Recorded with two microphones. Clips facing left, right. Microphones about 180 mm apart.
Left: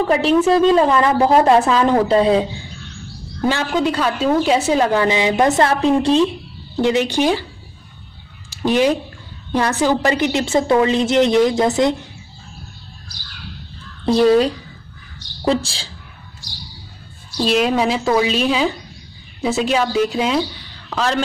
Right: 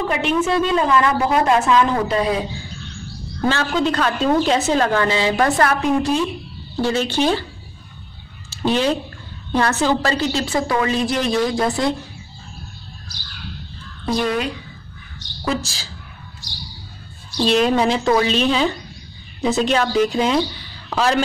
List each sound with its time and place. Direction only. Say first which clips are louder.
0.1 s a woman's voice: left 6 dB; 35° left (ahead or behind)
3.4 s a woman's voice: left 1 dB; 15° left (ahead or behind); by 6.2 s 30° left (ahead or behind)
6.8 s a woman's voice: left 3 dB; 15° left (ahead or behind)
8.5 s a sound: left 3 dB; 15° left (ahead or behind)
9.5 s a woman's voice: left 1 dB; 15° left (ahead or behind)
14.0 s a woman's voice: left 8 dB; 30° left (ahead or behind)
17.4 s speech: even; 5° left (ahead or behind)
20.9 s a man's voice: right 2 dB; 10° right (ahead or behind)